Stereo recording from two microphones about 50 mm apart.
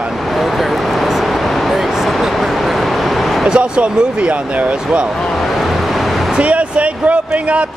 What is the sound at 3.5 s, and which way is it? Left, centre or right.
Speech, centre.